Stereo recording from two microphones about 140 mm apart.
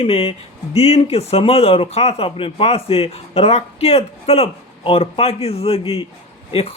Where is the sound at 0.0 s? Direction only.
45° left (ahead or behind).